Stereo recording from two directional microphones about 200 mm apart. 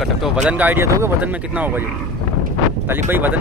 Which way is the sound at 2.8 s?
10° right (ahead or behind).